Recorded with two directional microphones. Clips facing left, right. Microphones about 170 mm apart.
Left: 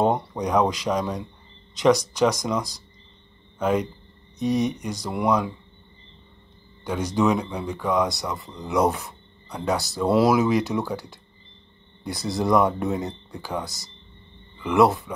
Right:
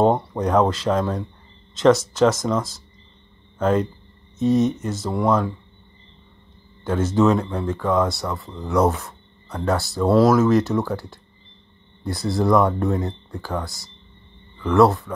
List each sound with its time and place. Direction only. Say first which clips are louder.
0.4 s a man's voice: right 2 dB; 10° left (ahead or behind)
6.8 s speech: right 4 dB; 15° left (ahead or behind)
12.2 s speech: right 2 dB; 20° left (ahead or behind)